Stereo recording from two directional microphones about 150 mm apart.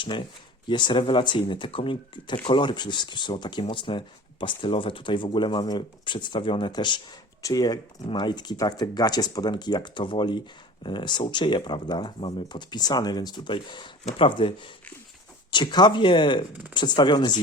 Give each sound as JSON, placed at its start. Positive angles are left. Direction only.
{"t": 0.0, "sound": "speech", "side_deg": 35}